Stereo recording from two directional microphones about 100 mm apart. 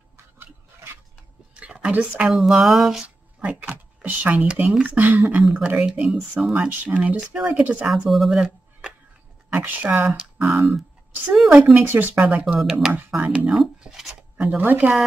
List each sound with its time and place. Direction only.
1.5 s a sound: 10° right (ahead or behind)
2.3 s speech: centre (ahead or behind)
3.3 s speech: 15° right (ahead or behind)
6.5 s speech: 15° right (ahead or behind); by 8.5 s centre (ahead or behind)
9.5 s speech: 15° right (ahead or behind)
11.7 s speech: 20° right (ahead or behind); by 12.9 s centre (ahead or behind)
13.2 s speech: 15° right (ahead or behind)
13.6 s speech: 5° right (ahead or behind)
14.6 s speech: 15° right (ahead or behind)